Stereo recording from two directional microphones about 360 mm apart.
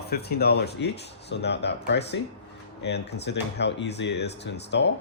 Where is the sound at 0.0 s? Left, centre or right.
Left.